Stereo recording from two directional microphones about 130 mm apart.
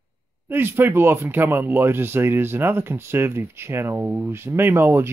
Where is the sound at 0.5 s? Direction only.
15° right (ahead or behind).